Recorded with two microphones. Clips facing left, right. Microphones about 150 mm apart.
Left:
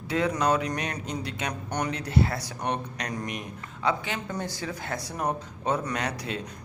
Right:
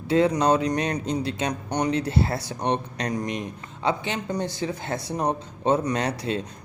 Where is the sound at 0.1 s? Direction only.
30° right (ahead or behind).